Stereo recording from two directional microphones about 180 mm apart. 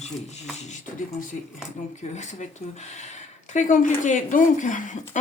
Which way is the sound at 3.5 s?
45° left (ahead or behind).